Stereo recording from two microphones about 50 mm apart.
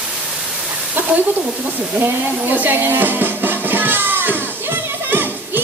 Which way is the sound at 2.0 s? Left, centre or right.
Right.